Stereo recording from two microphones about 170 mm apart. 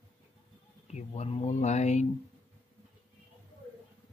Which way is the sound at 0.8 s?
40° left (ahead or behind).